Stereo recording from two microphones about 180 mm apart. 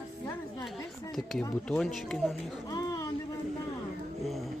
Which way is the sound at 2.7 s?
20° left (ahead or behind).